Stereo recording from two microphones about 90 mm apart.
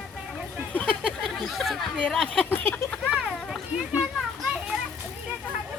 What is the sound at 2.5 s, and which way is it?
Speech, 25° left (ahead or behind).